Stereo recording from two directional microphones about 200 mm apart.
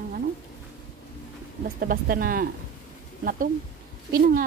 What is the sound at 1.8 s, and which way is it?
Speech, 45° right (ahead or behind).